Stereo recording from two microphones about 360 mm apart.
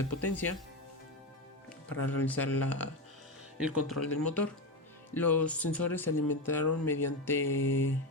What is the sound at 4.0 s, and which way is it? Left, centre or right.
Speech, left.